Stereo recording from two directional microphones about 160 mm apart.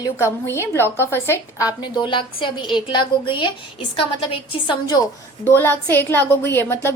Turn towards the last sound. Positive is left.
turn(degrees=15)  # may be behind; listen again after turning